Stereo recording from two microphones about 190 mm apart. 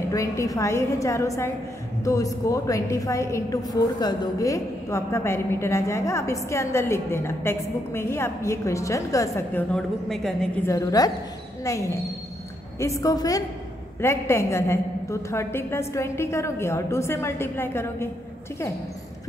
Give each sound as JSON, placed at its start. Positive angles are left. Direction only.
{"t": 0.1, "sound": "a woman's voice", "side_deg": 15}
{"t": 10.7, "sound": "a woman's voice", "side_deg": 20}